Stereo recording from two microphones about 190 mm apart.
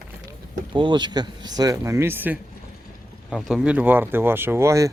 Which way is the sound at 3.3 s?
Centre (ahead or behind).